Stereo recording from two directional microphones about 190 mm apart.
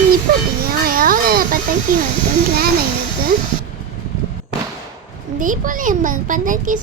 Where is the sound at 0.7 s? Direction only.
50° right (ahead or behind).